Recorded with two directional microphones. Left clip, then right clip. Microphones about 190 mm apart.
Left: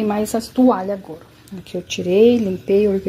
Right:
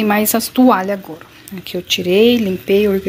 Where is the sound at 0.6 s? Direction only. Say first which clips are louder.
Right 4 dB; 25° right (ahead or behind).